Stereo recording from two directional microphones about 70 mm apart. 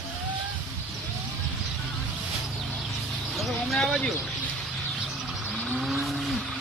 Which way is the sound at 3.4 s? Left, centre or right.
Centre.